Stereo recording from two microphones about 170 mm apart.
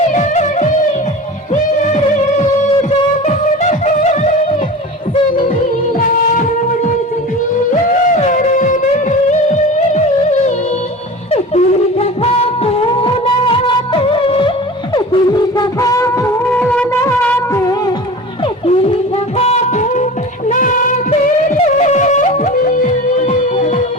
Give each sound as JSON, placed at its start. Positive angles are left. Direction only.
{"t": 0.1, "sound": "music", "side_deg": 45}
{"t": 3.2, "sound": "music", "side_deg": 45}
{"t": 8.1, "sound": "music", "side_deg": 45}
{"t": 11.3, "sound": "music", "side_deg": 35}
{"t": 18.6, "sound": "music", "side_deg": 35}